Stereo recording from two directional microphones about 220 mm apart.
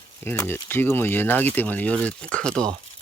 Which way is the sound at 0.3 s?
10° left (ahead or behind).